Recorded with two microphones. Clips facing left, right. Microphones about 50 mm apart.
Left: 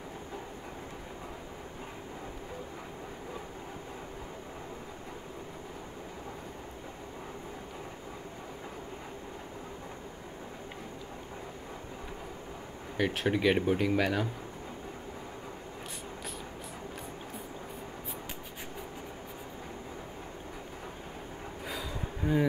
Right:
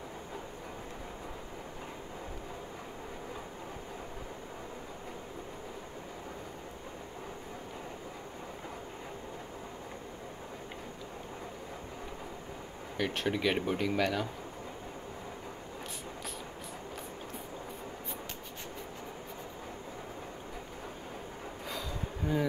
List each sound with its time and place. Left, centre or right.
12.9 s speech: centre
22.2 s speech: centre